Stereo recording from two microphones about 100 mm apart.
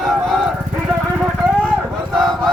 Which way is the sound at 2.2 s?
5° left (ahead or behind).